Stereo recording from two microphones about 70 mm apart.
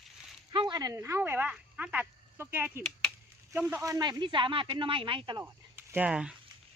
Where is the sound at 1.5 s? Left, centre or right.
Centre.